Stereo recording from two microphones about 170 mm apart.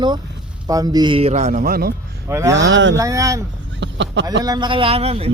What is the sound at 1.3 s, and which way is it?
Speech, 45° right (ahead or behind).